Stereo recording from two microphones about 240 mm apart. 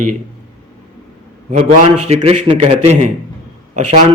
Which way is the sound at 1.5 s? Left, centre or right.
Right.